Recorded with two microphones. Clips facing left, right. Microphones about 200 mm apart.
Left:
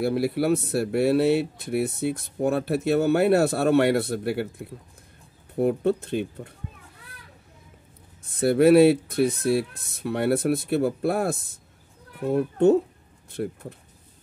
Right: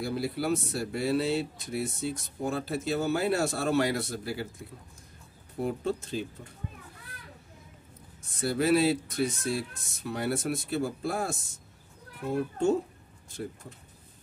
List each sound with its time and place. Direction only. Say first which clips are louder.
0.0 s speech: left 7 dB; 60° left (ahead or behind)
8.3 s speech: left 9 dB; 60° left (ahead or behind)